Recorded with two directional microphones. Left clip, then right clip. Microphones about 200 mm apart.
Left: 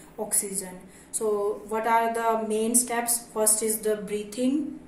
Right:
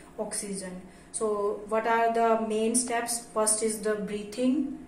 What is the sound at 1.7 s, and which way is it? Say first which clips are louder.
A woman's voice: left 1 dB; 55° left (ahead or behind).